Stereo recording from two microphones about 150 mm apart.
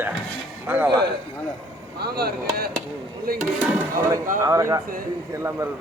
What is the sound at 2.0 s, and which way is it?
Speech, 90° right.